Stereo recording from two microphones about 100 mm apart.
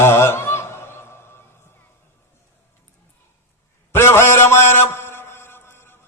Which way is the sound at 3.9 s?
25° left (ahead or behind).